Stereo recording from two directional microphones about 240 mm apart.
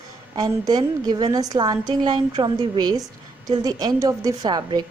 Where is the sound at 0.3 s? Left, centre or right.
Centre.